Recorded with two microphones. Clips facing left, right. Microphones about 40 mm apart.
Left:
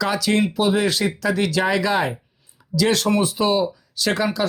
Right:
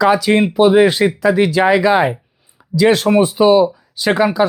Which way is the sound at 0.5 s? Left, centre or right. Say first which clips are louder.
Right 9 dB; right.